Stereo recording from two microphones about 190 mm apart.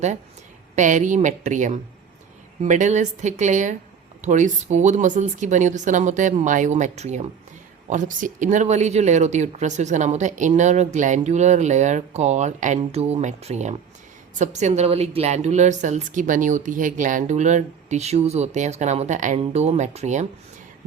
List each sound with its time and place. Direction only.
0.8 s speech: 40° right (ahead or behind)